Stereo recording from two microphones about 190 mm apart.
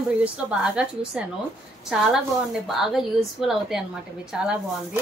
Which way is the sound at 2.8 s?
Centre (ahead or behind).